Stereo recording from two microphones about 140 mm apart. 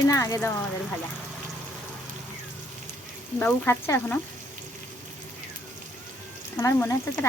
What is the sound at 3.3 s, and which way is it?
Speech, 15° left (ahead or behind).